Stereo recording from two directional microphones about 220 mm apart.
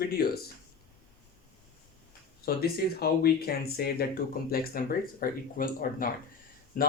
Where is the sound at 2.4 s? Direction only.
45° left (ahead or behind).